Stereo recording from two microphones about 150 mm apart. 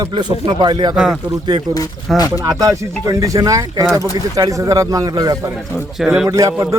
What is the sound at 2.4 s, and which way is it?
A man's voice, 25° right (ahead or behind).